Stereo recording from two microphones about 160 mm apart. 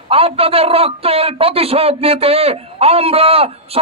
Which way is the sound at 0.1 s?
35° right (ahead or behind).